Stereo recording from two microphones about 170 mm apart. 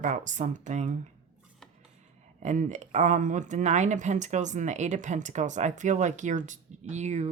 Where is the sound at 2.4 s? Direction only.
45° right (ahead or behind).